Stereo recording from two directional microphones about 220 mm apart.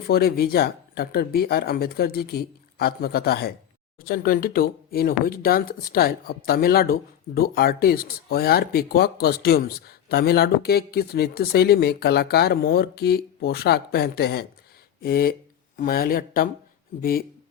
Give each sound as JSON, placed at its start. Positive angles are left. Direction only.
{"t": 0.1, "sound": "speech", "side_deg": 45}